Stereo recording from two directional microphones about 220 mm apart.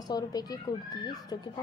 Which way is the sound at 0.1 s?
15° left (ahead or behind).